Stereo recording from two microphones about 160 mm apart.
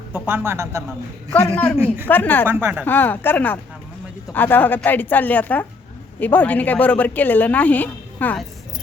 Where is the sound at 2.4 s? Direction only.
15° right (ahead or behind).